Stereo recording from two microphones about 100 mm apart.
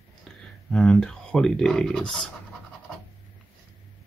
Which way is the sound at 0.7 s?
10° left (ahead or behind).